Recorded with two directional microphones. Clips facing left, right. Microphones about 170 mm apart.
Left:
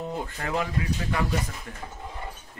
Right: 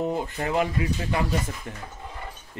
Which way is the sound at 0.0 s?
20° right (ahead or behind).